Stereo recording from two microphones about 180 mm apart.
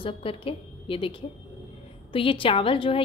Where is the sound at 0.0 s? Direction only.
30° left (ahead or behind).